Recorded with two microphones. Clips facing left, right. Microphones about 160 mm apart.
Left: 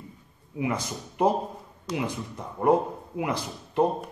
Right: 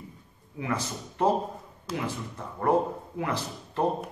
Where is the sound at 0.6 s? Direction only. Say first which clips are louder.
Left 2 dB; 15° left (ahead or behind).